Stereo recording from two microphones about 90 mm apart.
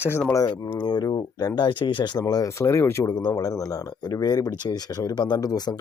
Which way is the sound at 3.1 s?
50° left (ahead or behind).